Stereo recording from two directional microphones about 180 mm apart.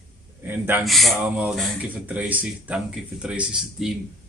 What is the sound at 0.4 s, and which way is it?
Speech, 10° right (ahead or behind).